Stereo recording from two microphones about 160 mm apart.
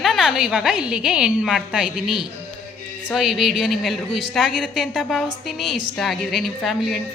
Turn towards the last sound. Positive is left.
turn(degrees=0)  # may be behind; listen again after turning